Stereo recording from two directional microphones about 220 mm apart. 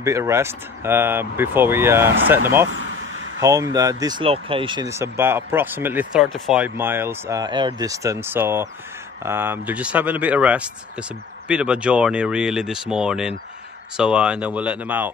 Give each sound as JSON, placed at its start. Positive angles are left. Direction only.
{"t": 0.0, "sound": "speech", "side_deg": -10}
{"t": 2.7, "sound": "speech", "side_deg": -65}
{"t": 3.3, "sound": "speech", "side_deg": -15}